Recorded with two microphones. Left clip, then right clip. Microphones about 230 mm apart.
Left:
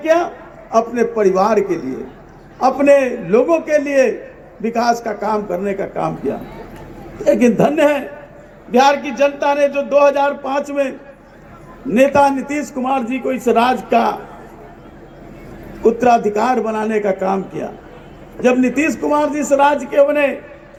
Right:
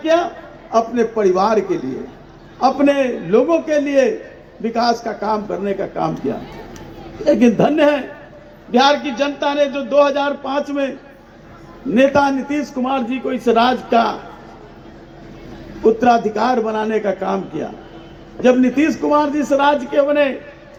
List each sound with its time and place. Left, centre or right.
0.0 s a man's voice: left
7.3 s a man's voice: left
11.9 s a man's voice: left
15.8 s a man's voice: left
18.4 s a man's voice: left